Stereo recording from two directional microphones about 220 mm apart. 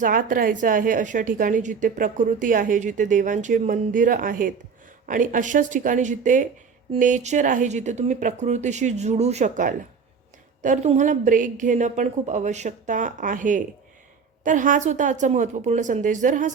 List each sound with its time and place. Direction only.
0.0 s a woman's voice: 40° right (ahead or behind)